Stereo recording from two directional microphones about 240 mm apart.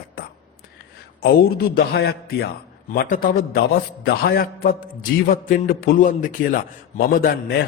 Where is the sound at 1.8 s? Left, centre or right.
Left.